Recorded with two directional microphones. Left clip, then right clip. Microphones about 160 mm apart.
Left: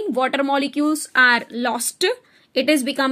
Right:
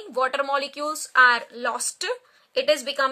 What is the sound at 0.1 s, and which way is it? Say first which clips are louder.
Speech: left 2 dB; 20° left (ahead or behind).